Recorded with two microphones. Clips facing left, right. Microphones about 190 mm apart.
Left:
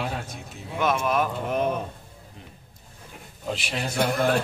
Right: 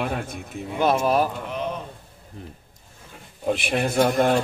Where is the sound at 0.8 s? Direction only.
35° right (ahead or behind).